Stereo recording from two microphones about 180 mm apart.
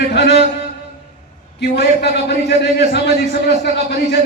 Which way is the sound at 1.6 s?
65° left (ahead or behind).